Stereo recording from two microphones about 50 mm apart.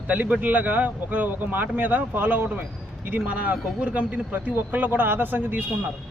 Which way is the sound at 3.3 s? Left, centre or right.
Right.